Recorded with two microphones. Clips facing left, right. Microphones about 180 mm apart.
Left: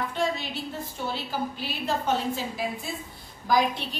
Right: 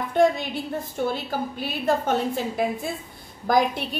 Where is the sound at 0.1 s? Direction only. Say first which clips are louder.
Right 8 dB; 55° right (ahead or behind).